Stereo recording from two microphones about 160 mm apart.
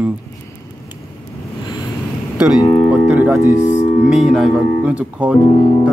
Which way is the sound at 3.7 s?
50° left (ahead or behind).